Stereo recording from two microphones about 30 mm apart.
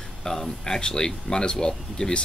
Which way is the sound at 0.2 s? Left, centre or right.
Centre.